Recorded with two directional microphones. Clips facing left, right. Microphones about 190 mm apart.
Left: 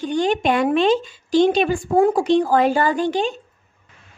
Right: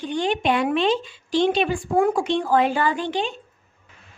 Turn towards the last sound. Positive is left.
turn(degrees=45)  # may be behind; listen again after turning